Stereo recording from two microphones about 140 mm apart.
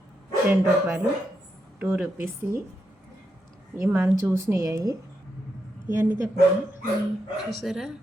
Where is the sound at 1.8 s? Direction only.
15° right (ahead or behind).